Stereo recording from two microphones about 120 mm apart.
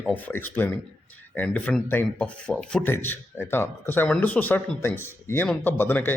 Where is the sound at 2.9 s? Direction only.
20° left (ahead or behind).